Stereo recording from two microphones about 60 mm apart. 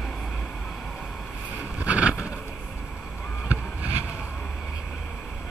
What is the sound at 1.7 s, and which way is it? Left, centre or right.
Vehicle, right.